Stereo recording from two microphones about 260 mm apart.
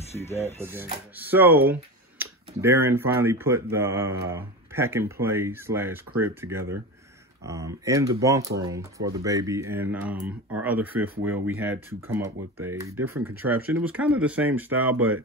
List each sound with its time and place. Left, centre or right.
0.1 s speech: left
0.6 s speech: centre